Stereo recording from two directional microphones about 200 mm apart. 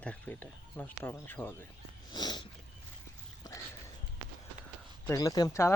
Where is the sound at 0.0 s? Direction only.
10° left (ahead or behind).